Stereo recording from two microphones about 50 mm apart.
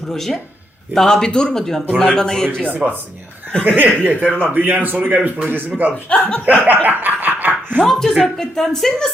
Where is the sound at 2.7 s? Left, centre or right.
Right.